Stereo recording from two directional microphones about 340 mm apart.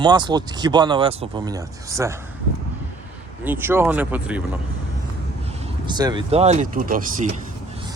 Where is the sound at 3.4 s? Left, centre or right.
Centre.